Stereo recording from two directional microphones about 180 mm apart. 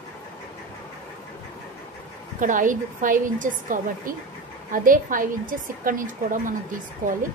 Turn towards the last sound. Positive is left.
turn(degrees=-45)  # may be behind; listen again after turning